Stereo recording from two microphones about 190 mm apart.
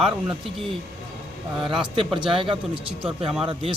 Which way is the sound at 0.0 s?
30° right (ahead or behind).